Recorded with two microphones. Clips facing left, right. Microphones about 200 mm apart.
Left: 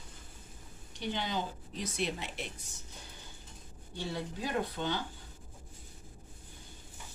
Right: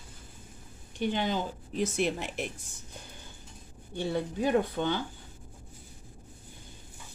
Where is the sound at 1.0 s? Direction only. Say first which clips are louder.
Right 6 dB; 55° right (ahead or behind).